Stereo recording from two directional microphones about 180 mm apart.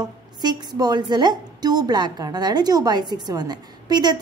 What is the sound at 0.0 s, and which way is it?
A woman's voice, 25° right (ahead or behind).